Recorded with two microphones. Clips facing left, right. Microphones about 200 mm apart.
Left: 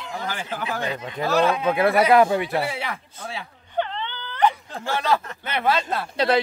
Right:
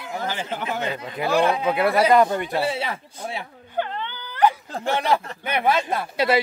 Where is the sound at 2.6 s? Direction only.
25° right (ahead or behind).